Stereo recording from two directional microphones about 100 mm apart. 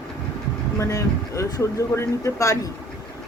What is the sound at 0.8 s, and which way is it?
Speech, 30° left (ahead or behind).